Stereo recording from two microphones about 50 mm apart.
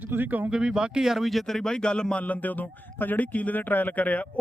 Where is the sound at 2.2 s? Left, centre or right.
Left.